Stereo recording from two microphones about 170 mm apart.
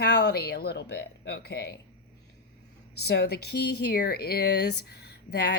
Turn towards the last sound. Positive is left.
turn(degrees=75)  # may be behind; listen again after turning